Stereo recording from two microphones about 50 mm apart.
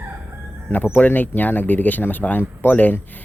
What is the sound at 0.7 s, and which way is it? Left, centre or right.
Speech, left.